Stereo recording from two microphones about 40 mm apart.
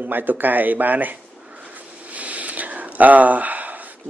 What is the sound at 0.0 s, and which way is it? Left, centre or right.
Speech, right.